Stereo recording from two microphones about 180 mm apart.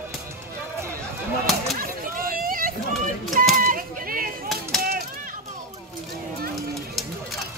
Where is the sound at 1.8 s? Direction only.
50° right (ahead or behind).